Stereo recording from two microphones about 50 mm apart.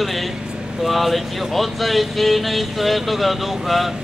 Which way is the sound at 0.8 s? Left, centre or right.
Centre.